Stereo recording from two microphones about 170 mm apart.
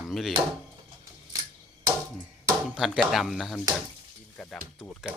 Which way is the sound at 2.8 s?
Centre (ahead or behind).